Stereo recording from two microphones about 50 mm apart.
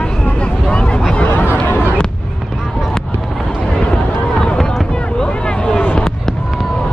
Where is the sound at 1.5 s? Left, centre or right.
Left.